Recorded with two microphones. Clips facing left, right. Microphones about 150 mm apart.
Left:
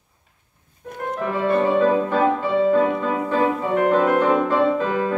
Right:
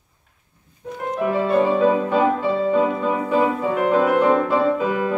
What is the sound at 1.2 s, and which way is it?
Music, 5° right (ahead or behind).